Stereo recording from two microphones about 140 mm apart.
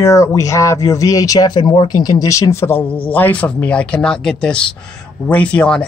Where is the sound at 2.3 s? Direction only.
20° left (ahead or behind).